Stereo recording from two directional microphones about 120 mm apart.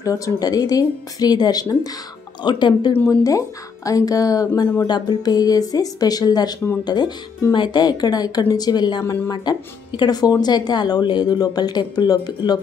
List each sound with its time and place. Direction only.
0.0 s speech: 30° left (ahead or behind)
2.9 s speech: 25° left (ahead or behind)